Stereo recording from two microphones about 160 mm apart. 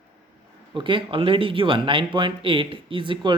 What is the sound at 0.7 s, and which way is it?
Speech, 30° right (ahead or behind).